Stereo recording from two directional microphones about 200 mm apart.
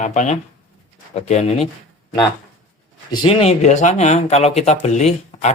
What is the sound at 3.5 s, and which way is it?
Speech, 35° left (ahead or behind).